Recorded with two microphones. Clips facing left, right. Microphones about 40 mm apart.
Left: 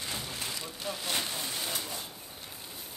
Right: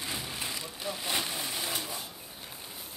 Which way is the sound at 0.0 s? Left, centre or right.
Centre.